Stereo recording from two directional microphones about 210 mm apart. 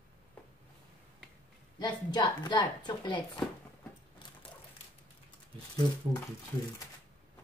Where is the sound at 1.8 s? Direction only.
20° left (ahead or behind).